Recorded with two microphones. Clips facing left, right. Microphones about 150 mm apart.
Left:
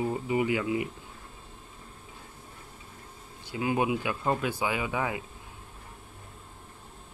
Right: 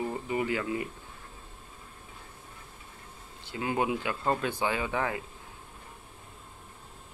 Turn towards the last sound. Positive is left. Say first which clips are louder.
# even
turn(degrees=10)  # may be behind; listen again after turning